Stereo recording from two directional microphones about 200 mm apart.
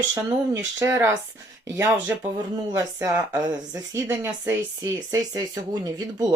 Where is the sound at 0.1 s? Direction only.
15° right (ahead or behind).